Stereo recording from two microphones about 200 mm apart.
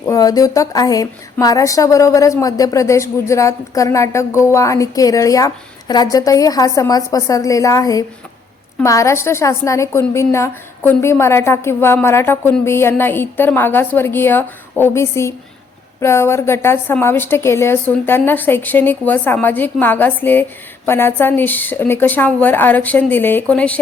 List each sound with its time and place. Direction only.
0.1 s a woman's voice: 20° left (ahead or behind)